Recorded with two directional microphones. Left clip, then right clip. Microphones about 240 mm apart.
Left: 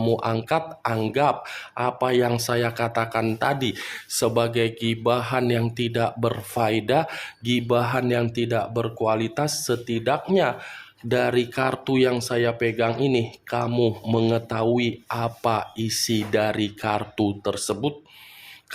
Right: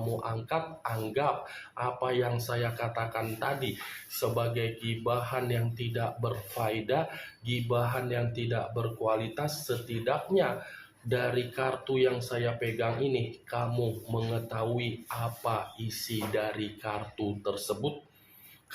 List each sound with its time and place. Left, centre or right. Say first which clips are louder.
0.2 s speech: left 9 dB; left